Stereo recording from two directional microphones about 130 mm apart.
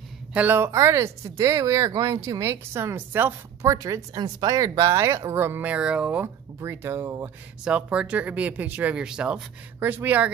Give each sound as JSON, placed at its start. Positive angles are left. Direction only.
{"t": 0.3, "sound": "speech", "side_deg": -15}
{"t": 3.7, "sound": "speech", "side_deg": -25}